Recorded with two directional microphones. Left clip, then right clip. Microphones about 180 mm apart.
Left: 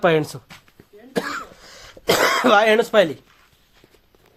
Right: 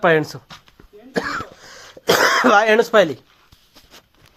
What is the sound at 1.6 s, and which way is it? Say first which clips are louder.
Throat clearing: right 2 dB; 20° right (ahead or behind).